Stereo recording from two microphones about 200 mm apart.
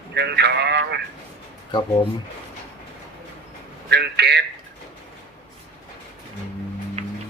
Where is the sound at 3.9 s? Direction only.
55° right (ahead or behind).